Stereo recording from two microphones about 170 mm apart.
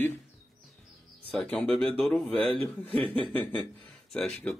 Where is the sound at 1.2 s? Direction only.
5° left (ahead or behind).